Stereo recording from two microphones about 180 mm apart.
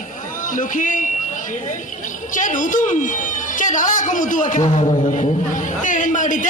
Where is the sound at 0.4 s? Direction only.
45° left (ahead or behind).